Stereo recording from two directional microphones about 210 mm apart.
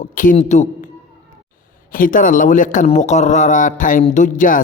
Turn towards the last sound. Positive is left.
turn(degrees=40)  # may be behind; listen again after turning